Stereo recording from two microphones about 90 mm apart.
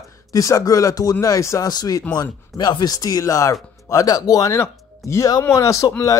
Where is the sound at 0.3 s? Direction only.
40° left (ahead or behind).